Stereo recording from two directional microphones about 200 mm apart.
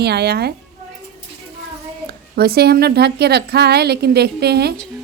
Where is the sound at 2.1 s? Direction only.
50° right (ahead or behind).